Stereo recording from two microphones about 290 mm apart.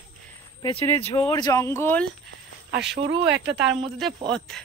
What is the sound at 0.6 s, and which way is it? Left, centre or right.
Speech, centre.